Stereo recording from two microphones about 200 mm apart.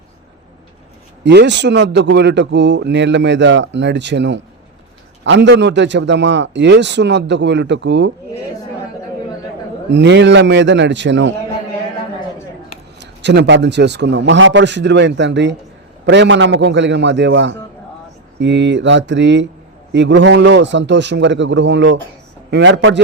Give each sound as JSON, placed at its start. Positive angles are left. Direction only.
{"t": 1.2, "sound": "a man's voice", "side_deg": -60}
{"t": 9.9, "sound": "a man's voice", "side_deg": -60}
{"t": 13.0, "sound": "a man's voice", "side_deg": -60}